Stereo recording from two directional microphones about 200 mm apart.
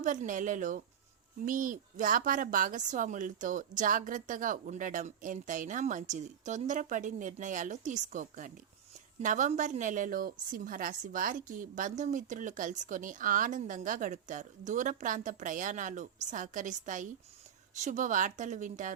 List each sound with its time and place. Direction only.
0.0 s a woman's voice: 40° right (ahead or behind)